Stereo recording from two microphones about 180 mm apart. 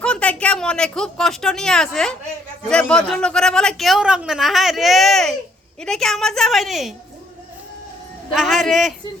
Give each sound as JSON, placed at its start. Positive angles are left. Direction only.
{"t": 0.0, "sound": "a man's voice", "side_deg": 5}
{"t": 8.3, "sound": "a man's voice", "side_deg": 0}